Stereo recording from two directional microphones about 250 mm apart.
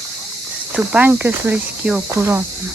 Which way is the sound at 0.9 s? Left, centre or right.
Centre.